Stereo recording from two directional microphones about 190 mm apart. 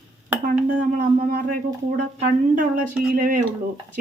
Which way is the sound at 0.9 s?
50° right (ahead or behind).